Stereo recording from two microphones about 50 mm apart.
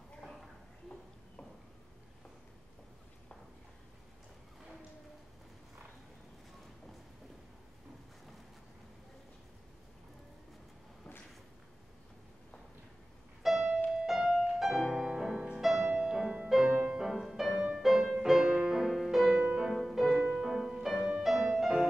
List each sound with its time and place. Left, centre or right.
13.4 s music: centre
15.6 s music: centre